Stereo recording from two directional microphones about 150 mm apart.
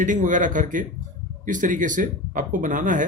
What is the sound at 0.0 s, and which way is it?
Speech, 60° right (ahead or behind).